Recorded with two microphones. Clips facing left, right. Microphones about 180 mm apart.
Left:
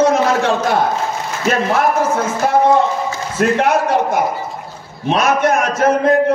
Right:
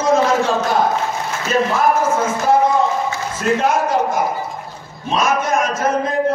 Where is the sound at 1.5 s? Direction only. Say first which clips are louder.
Left 1 dB; 70° left (ahead or behind).